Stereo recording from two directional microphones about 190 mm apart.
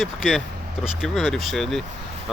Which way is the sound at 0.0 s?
5° right (ahead or behind).